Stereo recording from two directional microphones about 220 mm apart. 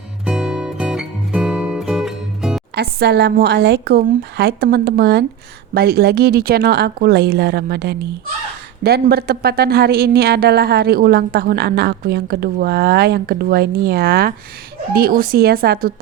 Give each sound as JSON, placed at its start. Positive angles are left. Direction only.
{"t": 0.3, "sound": "music", "side_deg": -5}
{"t": 2.7, "sound": "speech", "side_deg": -50}